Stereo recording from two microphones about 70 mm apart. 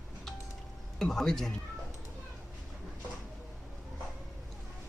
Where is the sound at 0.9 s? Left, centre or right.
Centre.